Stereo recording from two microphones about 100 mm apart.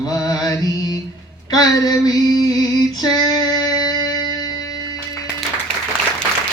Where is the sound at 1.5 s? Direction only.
40° left (ahead or behind).